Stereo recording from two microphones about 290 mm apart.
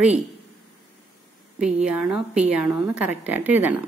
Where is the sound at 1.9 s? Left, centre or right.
Centre.